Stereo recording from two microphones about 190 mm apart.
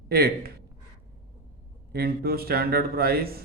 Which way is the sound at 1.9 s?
55° right (ahead or behind).